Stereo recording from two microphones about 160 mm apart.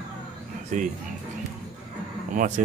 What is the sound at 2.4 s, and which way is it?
Speech, 50° right (ahead or behind).